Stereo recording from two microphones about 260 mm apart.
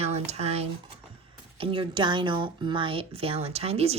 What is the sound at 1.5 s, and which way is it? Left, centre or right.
Speech, centre.